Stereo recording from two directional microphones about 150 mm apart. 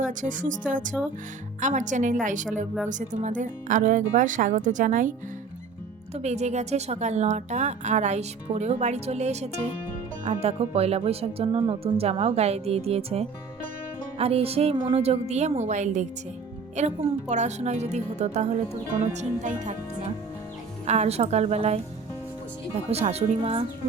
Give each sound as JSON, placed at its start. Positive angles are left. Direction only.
{"t": 0.0, "sound": "speech", "side_deg": -60}
{"t": 6.1, "sound": "a woman's voice", "side_deg": -50}
{"t": 14.2, "sound": "music", "side_deg": -40}
{"t": 14.8, "sound": "a woman's voice", "side_deg": -45}
{"t": 20.8, "sound": "a woman's voice", "side_deg": -45}
{"t": 23.4, "sound": "music", "side_deg": -40}